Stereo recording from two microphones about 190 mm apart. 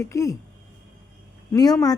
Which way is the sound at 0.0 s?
15° left (ahead or behind).